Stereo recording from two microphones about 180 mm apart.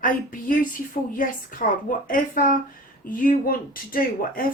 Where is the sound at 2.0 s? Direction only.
50° left (ahead or behind).